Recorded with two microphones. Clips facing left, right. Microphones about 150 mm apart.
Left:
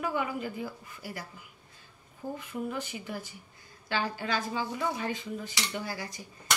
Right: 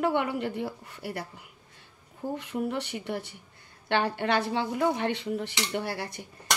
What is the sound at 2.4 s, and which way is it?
A woman's voice, 75° right (ahead or behind).